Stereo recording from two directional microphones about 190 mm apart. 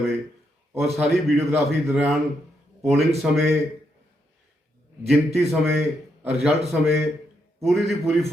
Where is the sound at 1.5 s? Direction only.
10° right (ahead or behind).